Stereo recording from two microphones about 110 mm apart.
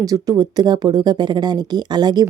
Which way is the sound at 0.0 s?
30° right (ahead or behind).